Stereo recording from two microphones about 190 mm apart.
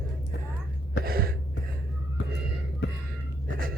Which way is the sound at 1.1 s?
50° right (ahead or behind).